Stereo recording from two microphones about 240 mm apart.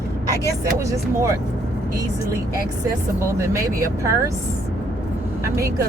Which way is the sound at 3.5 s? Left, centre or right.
Centre.